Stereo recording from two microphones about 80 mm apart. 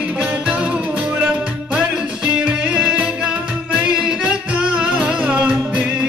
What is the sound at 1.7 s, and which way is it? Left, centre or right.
Music, centre.